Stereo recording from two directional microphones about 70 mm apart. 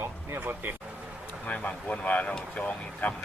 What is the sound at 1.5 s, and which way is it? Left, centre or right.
Speech, left.